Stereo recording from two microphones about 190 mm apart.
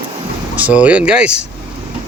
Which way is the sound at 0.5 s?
5° right (ahead or behind).